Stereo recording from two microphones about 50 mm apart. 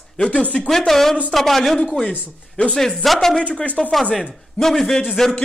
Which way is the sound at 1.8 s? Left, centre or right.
Left.